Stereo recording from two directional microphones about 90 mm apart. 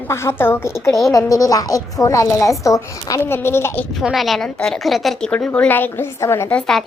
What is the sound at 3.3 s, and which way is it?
Speech, 25° left (ahead or behind).